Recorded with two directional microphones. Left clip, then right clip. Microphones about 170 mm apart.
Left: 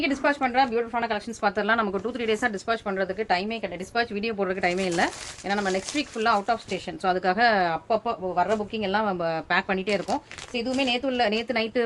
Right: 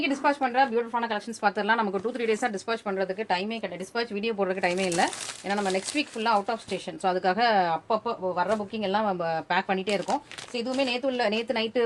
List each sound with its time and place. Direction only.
0.0 s a woman's voice: 30° left (ahead or behind)